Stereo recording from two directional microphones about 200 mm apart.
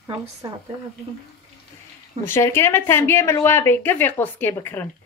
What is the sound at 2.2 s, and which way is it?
A woman's voice, 10° left (ahead or behind).